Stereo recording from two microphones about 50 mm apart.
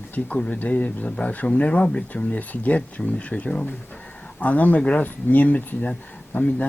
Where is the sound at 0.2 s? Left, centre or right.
Left.